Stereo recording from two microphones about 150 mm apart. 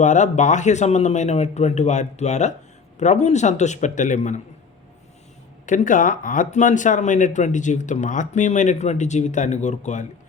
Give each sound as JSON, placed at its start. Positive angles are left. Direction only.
{"t": 0.0, "sound": "speech", "side_deg": 50}
{"t": 5.6, "sound": "speech", "side_deg": 55}